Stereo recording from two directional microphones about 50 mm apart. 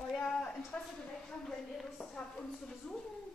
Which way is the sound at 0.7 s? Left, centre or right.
Centre.